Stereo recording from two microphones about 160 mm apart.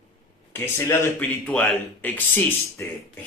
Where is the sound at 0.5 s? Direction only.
15° left (ahead or behind).